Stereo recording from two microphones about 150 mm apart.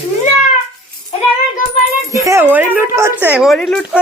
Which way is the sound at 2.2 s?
15° right (ahead or behind).